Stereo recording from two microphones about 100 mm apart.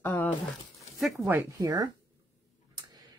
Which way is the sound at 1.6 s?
40° right (ahead or behind).